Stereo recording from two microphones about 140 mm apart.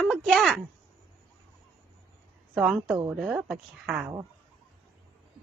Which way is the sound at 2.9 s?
25° right (ahead or behind).